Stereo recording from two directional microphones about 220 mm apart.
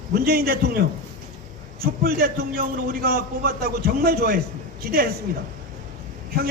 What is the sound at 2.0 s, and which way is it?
A man's voice, 45° right (ahead or behind).